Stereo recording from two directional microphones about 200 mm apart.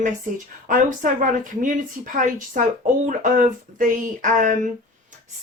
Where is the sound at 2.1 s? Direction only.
40° right (ahead or behind).